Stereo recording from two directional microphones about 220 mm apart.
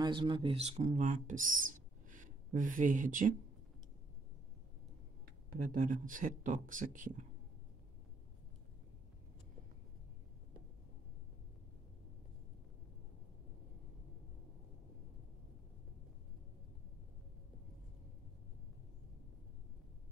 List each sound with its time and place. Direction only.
0.0 s speech: 20° right (ahead or behind)
5.5 s speech: 40° right (ahead or behind)